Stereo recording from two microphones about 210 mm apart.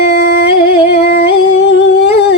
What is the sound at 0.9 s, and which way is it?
Humming, 50° left (ahead or behind).